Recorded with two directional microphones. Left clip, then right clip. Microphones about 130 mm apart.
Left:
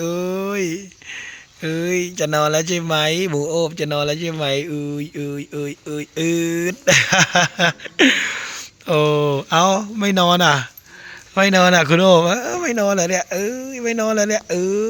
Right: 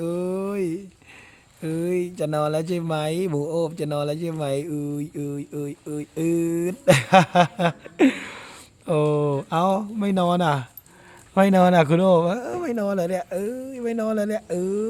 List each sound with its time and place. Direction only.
0.2 s a sound: 5° left (ahead or behind)
1.6 s speech: centre (ahead or behind)
11.3 s speech: 25° right (ahead or behind)
11.7 s speech: 10° right (ahead or behind); by 14.8 s 15° left (ahead or behind)